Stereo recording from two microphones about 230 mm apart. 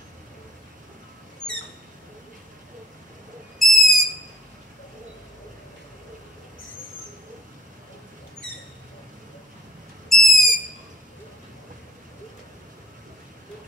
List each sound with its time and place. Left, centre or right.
1.4 s a sound: right
3.5 s owl: centre
10.0 s owl: centre